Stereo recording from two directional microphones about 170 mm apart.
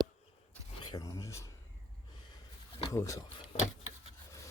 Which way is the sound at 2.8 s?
20° left (ahead or behind).